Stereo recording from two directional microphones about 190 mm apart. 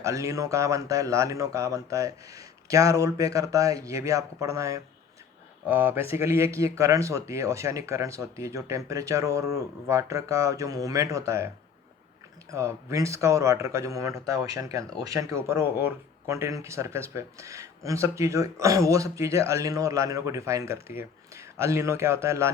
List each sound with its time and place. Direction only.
0.0 s speech: 15° right (ahead or behind)
12.5 s speech: 15° right (ahead or behind)